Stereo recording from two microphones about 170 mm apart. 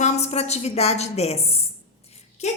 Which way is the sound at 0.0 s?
40° left (ahead or behind).